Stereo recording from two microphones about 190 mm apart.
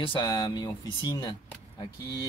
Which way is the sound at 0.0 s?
25° left (ahead or behind).